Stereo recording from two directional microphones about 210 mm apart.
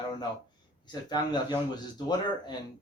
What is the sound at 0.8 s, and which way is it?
Speech, 20° left (ahead or behind).